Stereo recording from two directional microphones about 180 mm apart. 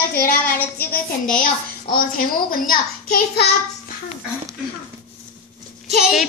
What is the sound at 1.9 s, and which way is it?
A child's voice, 50° left (ahead or behind).